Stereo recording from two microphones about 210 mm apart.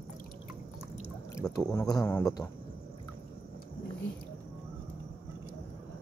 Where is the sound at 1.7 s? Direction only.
15° left (ahead or behind).